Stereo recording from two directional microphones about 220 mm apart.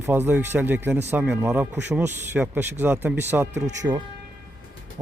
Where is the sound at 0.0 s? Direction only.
10° right (ahead or behind).